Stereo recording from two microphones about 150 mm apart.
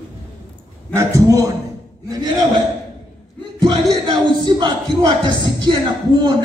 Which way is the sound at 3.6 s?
30° right (ahead or behind).